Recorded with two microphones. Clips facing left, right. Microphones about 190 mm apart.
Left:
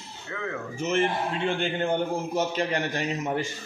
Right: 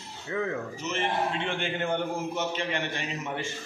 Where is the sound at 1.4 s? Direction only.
30° left (ahead or behind).